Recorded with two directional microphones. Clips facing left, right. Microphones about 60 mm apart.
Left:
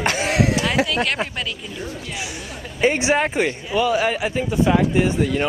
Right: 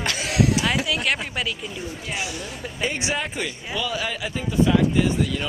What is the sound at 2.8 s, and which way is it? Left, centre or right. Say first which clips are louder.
Speech: left 8 dB; left.